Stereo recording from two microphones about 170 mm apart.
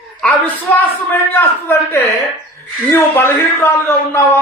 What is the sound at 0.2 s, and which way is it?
A man's voice, 5° left (ahead or behind).